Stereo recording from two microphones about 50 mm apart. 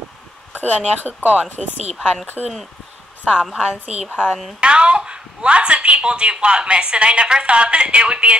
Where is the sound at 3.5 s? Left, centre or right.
Right.